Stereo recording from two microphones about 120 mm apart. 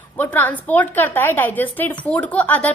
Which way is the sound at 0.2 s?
15° left (ahead or behind).